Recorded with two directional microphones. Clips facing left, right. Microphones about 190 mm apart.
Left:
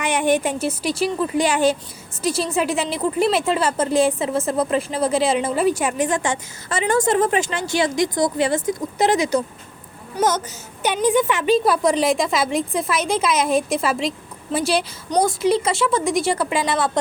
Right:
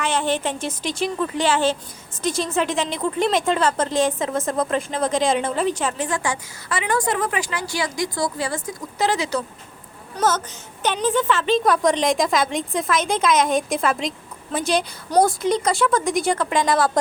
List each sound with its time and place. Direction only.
0.0 s a woman's voice: 15° left (ahead or behind)
15.1 s a woman's voice: centre (ahead or behind)